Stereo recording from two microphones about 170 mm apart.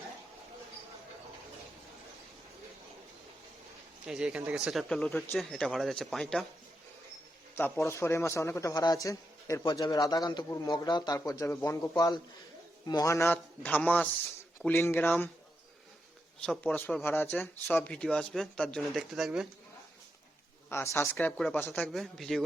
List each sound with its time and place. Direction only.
4.0 s speech: 5° right (ahead or behind)
7.5 s a man's voice: 15° left (ahead or behind)
16.4 s a man's voice: 5° left (ahead or behind)
20.7 s a man's voice: 15° left (ahead or behind)